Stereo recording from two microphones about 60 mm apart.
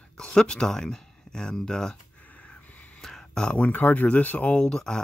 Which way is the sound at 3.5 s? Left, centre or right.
Left.